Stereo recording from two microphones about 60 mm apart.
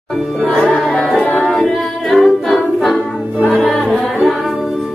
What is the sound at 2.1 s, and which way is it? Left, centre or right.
Music, centre.